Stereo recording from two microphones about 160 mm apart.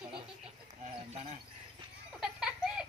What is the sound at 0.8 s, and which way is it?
Speech, 40° right (ahead or behind).